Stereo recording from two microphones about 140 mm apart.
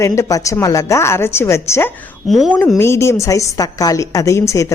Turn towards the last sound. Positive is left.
turn(degrees=20)  # may be behind; listen again after turning